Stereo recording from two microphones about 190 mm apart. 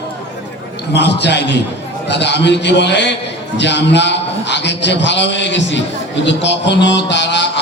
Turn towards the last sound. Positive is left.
turn(degrees=65)  # may be behind; listen again after turning